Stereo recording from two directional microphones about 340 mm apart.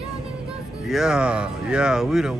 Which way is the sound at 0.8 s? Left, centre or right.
Centre.